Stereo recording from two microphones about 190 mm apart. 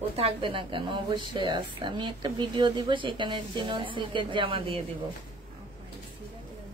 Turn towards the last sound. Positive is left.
turn(degrees=-30)  # may be behind; listen again after turning